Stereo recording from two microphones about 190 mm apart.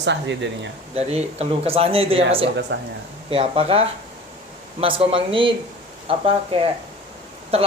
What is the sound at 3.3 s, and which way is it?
Speech, 30° right (ahead or behind).